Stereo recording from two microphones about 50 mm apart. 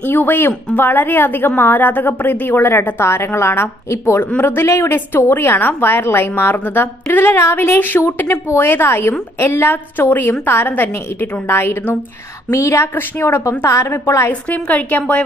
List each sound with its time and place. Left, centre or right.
0.0 s a woman's voice: left
4.4 s speech: left
5.3 s a woman's voice: left
12.4 s a woman's voice: left
13.8 s speech: left
14.5 s a woman's voice: left